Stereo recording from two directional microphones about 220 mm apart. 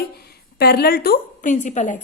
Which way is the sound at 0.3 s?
45° left (ahead or behind).